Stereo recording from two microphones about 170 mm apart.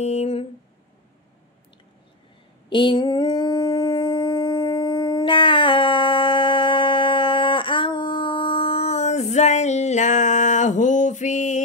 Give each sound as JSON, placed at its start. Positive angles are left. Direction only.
{"t": 0.0, "sound": "speech", "side_deg": 40}
{"t": 2.7, "sound": "dog", "side_deg": 30}